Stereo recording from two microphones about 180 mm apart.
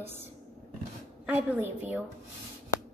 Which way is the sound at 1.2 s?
10° right (ahead or behind).